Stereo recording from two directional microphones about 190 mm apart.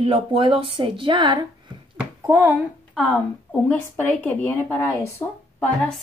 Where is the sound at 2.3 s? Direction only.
10° right (ahead or behind).